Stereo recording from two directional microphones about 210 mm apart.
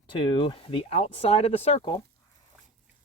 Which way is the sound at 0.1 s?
20° left (ahead or behind).